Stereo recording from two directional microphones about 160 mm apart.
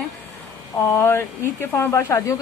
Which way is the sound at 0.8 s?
15° left (ahead or behind).